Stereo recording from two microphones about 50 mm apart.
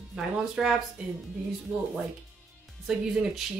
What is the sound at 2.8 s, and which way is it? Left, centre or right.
Speech, centre.